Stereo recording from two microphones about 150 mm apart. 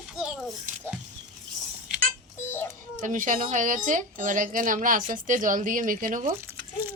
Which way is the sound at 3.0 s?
60° right (ahead or behind).